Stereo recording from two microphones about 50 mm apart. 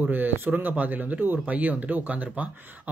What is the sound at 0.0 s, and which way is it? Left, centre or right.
Speech, right.